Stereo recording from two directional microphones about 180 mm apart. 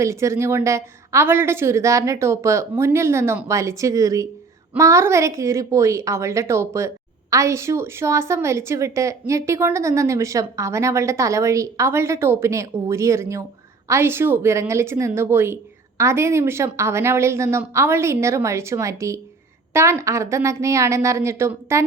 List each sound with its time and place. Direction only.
0.0 s a woman's voice: 15° right (ahead or behind)